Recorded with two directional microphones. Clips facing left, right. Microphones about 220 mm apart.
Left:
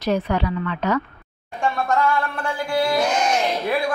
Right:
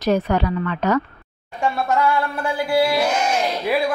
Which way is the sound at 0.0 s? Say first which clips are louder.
Right 3 dB; 45° right (ahead or behind).